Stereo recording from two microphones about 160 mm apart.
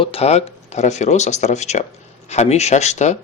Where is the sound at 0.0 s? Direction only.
40° left (ahead or behind).